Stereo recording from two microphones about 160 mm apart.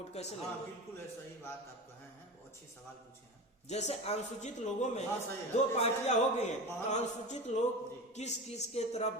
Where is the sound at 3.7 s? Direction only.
45° left (ahead or behind).